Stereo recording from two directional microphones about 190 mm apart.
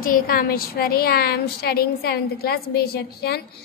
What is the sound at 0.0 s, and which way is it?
A woman's voice, 50° left (ahead or behind).